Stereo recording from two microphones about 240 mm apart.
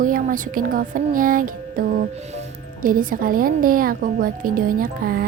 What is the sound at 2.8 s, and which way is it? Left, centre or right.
A woman's voice, right.